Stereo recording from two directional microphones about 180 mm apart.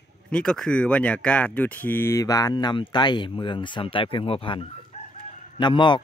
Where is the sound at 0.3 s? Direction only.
5° left (ahead or behind).